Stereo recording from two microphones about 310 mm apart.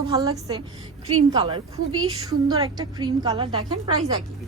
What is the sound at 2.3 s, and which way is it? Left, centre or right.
A woman's voice, centre.